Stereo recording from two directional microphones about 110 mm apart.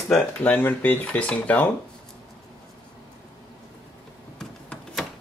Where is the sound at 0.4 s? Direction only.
15° left (ahead or behind).